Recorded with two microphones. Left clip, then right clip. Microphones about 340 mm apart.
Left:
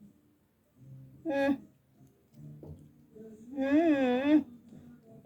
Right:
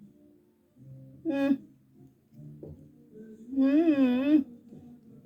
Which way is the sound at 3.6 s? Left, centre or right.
Centre.